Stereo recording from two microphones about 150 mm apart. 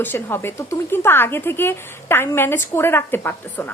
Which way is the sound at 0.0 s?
15° left (ahead or behind).